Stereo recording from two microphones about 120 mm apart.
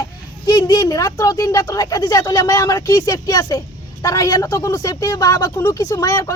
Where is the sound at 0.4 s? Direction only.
30° left (ahead or behind).